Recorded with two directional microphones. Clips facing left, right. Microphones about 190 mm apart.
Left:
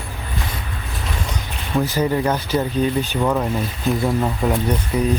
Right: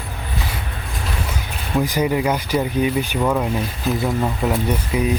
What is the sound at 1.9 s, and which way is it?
Speech, 10° right (ahead or behind).